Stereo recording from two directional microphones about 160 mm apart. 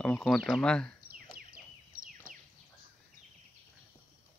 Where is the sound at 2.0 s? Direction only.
60° right (ahead or behind).